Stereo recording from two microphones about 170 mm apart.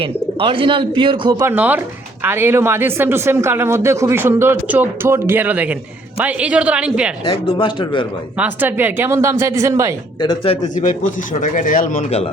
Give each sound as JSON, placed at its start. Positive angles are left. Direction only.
{"t": 0.0, "sound": "speech", "side_deg": -30}
{"t": 1.5, "sound": "speech", "side_deg": -10}
{"t": 7.3, "sound": "a man's voice", "side_deg": 30}
{"t": 8.4, "sound": "speech", "side_deg": -10}
{"t": 10.2, "sound": "speech", "side_deg": 30}
{"t": 10.8, "sound": "a man's voice", "side_deg": 50}